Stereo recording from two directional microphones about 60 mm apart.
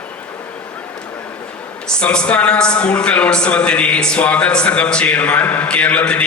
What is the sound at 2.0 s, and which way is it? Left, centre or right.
A woman's voice, centre.